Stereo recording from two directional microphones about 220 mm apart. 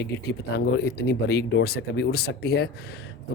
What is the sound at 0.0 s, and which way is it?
Speech, 50° left (ahead or behind).